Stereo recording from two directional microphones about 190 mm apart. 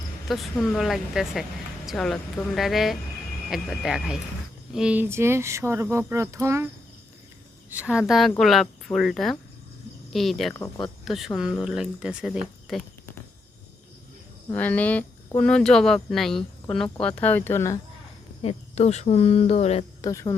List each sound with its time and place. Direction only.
0.3 s speech: centre (ahead or behind)
7.7 s speech: 5° right (ahead or behind)
14.5 s speech: 10° left (ahead or behind)
18.4 s speech: 35° left (ahead or behind)
20.0 s speech: 20° left (ahead or behind)